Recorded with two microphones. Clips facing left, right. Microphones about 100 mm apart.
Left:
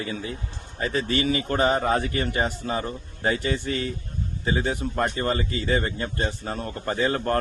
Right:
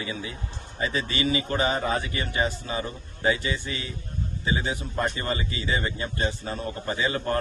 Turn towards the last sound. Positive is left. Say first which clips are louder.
# left 3 dB
turn(degrees=45)  # may be behind; listen again after turning